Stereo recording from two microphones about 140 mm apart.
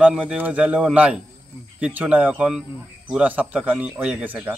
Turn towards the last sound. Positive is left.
turn(degrees=-15)  # may be behind; listen again after turning